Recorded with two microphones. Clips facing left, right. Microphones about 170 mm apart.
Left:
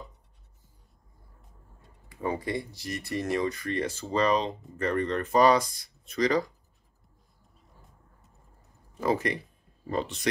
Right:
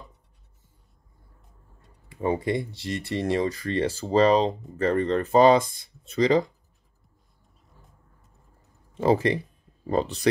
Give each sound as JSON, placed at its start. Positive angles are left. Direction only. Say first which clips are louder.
{"t": 2.0, "sound": "speech", "louder": "right 6 dB", "side_deg": -25}
{"t": 8.9, "sound": "speech", "louder": "right 6 dB", "side_deg": -30}